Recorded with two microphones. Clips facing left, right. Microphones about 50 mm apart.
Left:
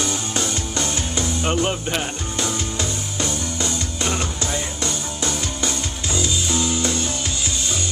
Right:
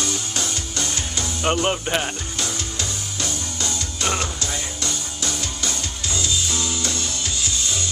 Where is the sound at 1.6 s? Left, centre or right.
Centre.